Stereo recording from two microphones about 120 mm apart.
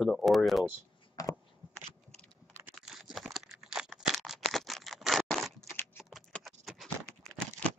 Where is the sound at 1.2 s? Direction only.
30° left (ahead or behind).